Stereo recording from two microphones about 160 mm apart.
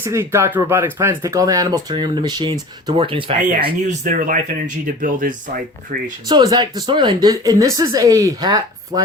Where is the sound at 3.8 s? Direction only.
55° right (ahead or behind).